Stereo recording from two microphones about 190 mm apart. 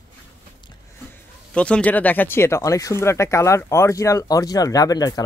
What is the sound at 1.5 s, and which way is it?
Speech, 5° left (ahead or behind).